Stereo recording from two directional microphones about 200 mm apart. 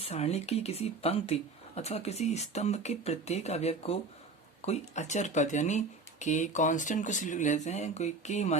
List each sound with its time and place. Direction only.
0.0 s speech: 30° left (ahead or behind)